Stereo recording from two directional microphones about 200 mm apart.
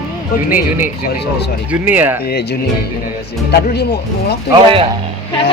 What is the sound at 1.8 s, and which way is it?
Speech, 10° right (ahead or behind).